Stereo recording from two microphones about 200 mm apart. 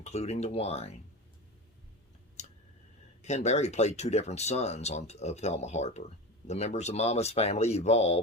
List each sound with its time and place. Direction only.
0.0 s speech: 35° left (ahead or behind)
3.2 s speech: 35° left (ahead or behind)